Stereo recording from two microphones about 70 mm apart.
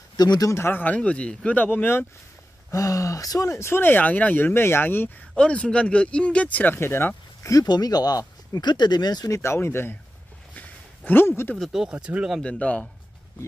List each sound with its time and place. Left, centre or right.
0.2 s speech: left
0.5 s speech: left
0.7 s speech: left
2.7 s speech: left
3.8 s speech: left
5.3 s speech: centre
6.7 s speech: left
7.6 s speech: left
9.3 s speech: left
10.5 s a sound: left
11.7 s speech: centre
12.4 s speech: centre